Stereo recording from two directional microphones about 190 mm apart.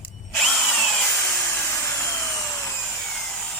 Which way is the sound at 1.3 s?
10° left (ahead or behind).